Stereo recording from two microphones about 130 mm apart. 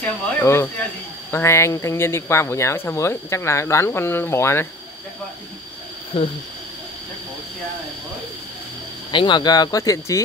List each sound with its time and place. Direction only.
0.0 s speech: 20° left (ahead or behind)
6.1 s speech: 45° left (ahead or behind)
9.1 s speech: 40° left (ahead or behind)